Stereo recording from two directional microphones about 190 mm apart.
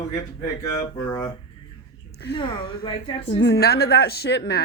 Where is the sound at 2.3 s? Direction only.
25° left (ahead or behind).